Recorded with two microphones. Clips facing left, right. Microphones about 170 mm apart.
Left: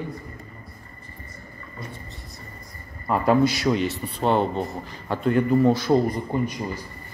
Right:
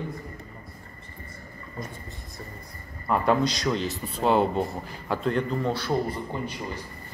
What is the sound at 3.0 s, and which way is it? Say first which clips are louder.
A man's voice: left 4 dB; 5° left (ahead or behind).